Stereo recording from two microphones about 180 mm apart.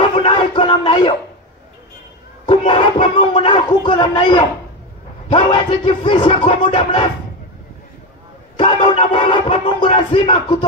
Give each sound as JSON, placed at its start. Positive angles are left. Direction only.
{"t": 0.0, "sound": "a sound", "side_deg": 30}
{"t": 2.4, "sound": "speech", "side_deg": 30}
{"t": 8.5, "sound": "speech", "side_deg": 25}